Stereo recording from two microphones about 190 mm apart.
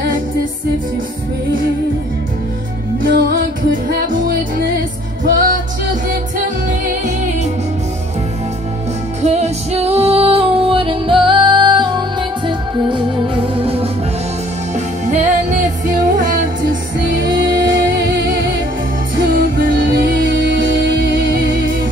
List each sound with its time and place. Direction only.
3.0 s music: 50° right (ahead or behind)
9.2 s music: 35° right (ahead or behind)
15.0 s music: 40° right (ahead or behind)